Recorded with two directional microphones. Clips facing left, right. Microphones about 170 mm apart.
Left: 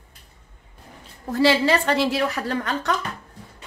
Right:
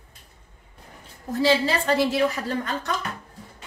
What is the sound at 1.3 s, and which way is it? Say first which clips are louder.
A woman's voice: left 3 dB; 75° left (ahead or behind).